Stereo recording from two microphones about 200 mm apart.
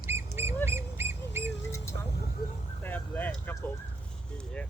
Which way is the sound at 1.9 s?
65° right (ahead or behind).